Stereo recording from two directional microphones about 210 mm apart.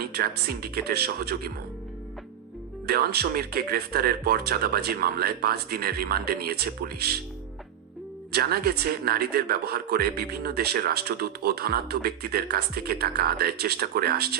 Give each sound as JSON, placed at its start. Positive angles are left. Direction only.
{"t": 0.0, "sound": "speech", "side_deg": -45}
{"t": 2.8, "sound": "speech", "side_deg": -45}
{"t": 8.3, "sound": "speech", "side_deg": -45}